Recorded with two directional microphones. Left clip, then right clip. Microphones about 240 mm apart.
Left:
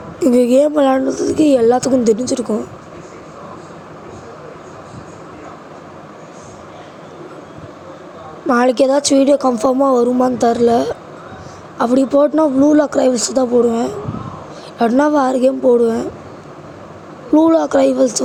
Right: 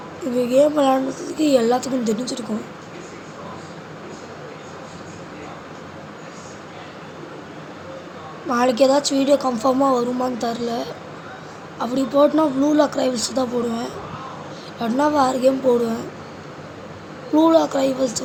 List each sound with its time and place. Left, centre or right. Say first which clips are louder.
0.3 s a woman's voice: left 4 dB; left
8.4 s a woman's voice: left 4 dB; left
17.3 s a woman's voice: left 4 dB; left